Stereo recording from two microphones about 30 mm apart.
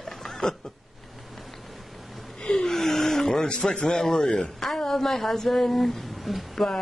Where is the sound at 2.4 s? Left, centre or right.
Left.